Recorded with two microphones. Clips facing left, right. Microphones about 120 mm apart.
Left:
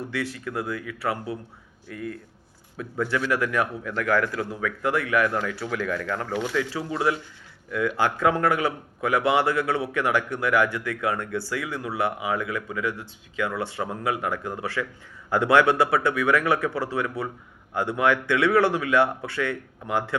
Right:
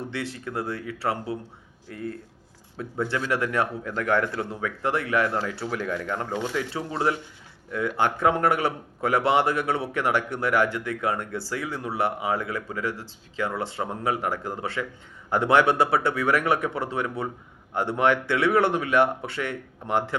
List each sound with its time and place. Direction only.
0.0 s a man's voice: 25° right (ahead or behind)